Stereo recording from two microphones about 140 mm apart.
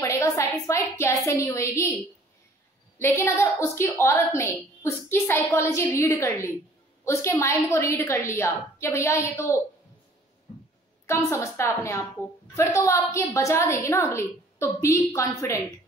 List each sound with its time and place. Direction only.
0.0 s a woman's voice: 20° left (ahead or behind)
3.0 s a woman's voice: 15° left (ahead or behind)
11.1 s a woman's voice: 20° left (ahead or behind)